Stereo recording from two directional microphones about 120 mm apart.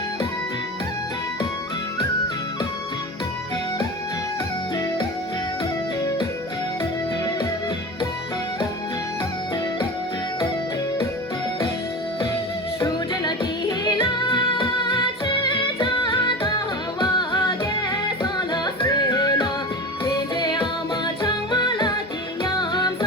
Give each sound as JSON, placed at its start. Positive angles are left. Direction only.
{"t": 6.0, "sound": "music", "side_deg": 30}
{"t": 12.8, "sound": "music", "side_deg": 35}